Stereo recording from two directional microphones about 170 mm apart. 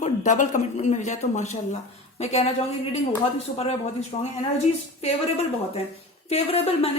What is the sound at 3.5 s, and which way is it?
Speech, 35° left (ahead or behind).